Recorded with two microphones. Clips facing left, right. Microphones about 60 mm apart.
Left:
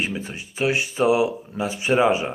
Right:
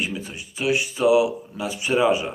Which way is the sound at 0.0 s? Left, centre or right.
Left.